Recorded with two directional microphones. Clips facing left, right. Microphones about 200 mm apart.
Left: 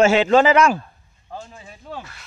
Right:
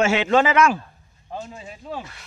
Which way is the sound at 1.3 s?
20° right (ahead or behind).